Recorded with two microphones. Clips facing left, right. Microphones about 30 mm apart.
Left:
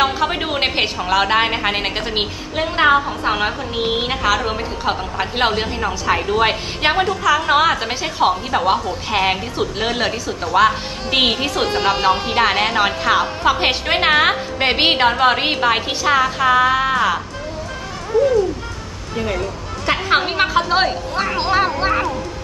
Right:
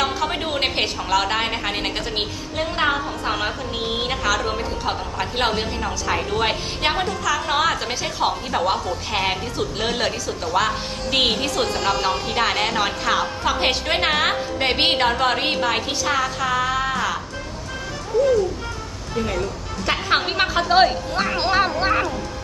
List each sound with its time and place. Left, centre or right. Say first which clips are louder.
0.0 s a woman's voice: left 5 dB; centre
19.1 s a woman's voice: left 2 dB; centre